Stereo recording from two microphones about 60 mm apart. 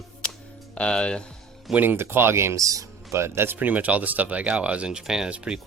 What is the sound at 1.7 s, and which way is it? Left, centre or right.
Speech, right.